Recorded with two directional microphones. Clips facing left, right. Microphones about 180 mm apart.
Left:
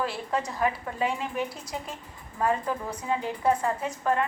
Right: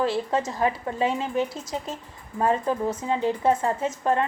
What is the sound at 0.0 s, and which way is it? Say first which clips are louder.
A woman's voice: right 5 dB; 25° right (ahead or behind).